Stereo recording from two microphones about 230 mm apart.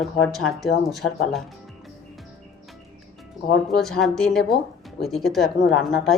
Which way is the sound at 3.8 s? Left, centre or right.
Centre.